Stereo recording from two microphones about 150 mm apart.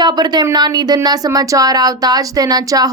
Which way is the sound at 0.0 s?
30° right (ahead or behind).